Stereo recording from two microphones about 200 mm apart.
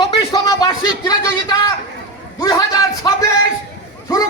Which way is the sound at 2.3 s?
20° left (ahead or behind).